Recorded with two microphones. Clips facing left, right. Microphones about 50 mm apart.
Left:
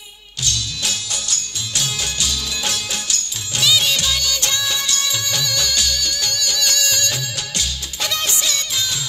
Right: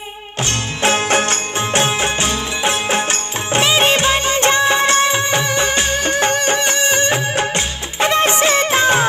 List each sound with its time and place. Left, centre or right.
0.5 s music: right